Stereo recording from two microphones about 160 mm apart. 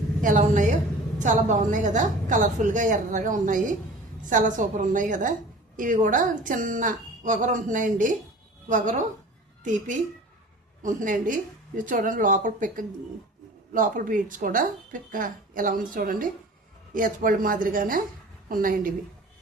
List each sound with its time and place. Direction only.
0.2 s a woman's voice: 55° right (ahead or behind)
10.8 s a woman's voice: 55° right (ahead or behind)